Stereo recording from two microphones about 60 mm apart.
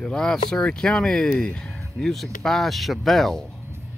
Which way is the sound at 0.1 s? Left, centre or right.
Centre.